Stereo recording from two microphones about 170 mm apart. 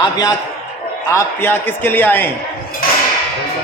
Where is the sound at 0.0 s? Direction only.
25° left (ahead or behind).